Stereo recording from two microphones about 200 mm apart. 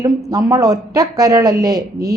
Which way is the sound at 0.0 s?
15° right (ahead or behind).